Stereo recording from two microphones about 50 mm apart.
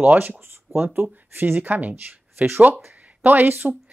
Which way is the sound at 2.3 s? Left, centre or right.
Right.